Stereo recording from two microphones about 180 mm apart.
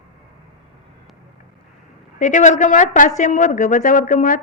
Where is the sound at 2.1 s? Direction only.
45° left (ahead or behind).